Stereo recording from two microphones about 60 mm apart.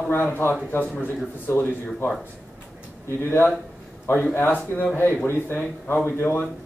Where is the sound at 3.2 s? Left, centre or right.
Left.